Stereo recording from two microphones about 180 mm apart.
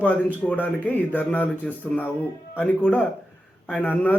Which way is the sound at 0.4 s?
10° left (ahead or behind).